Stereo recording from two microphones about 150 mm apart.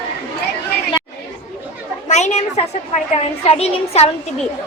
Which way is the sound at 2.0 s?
50° left (ahead or behind).